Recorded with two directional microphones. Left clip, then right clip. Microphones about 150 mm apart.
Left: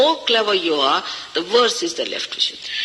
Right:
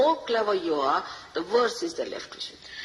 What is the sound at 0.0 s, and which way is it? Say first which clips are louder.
A man's voice: left 7 dB; 15° left (ahead or behind).